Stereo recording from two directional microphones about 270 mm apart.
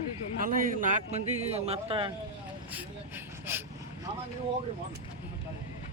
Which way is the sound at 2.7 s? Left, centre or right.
Centre.